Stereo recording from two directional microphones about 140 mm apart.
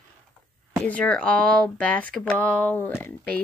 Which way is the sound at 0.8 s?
10° left (ahead or behind).